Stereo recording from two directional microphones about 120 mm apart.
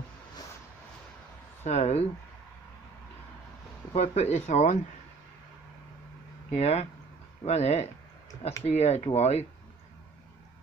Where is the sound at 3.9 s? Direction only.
65° left (ahead or behind).